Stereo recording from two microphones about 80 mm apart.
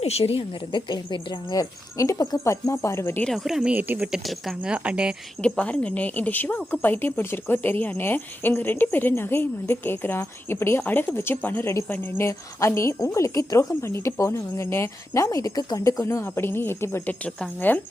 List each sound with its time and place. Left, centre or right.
0.7 s speech: left
2.0 s speech: left
3.2 s speech: centre
3.7 s speech: right
4.1 s speech: centre
4.7 s speech: centre
5.4 s speech: centre; by 17.2 s left
17.2 s speech: centre